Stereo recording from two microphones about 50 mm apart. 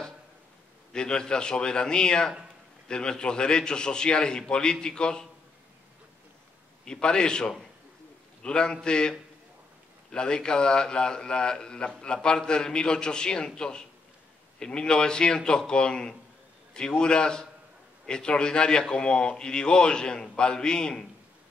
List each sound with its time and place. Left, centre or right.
0.9 s a man's voice: centre
6.8 s a man's voice: centre
10.1 s a man's voice: centre